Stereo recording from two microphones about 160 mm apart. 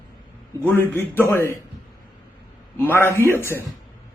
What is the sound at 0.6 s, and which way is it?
Speech, 15° left (ahead or behind).